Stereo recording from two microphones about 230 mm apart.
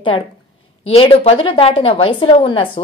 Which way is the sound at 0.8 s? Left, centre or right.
Left.